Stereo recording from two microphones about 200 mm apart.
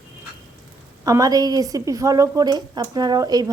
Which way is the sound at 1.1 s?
20° right (ahead or behind).